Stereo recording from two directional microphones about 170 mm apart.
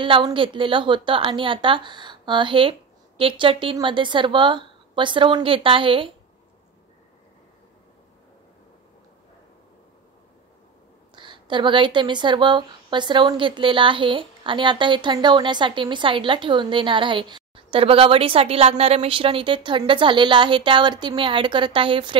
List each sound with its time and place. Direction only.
0.0 s a woman's voice: 30° right (ahead or behind)
11.1 s speech: 30° right (ahead or behind)